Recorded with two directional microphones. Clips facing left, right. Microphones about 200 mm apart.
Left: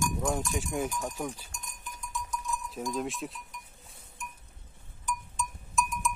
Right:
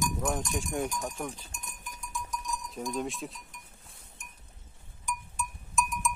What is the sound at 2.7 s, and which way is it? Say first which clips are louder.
Speech: even; centre (ahead or behind).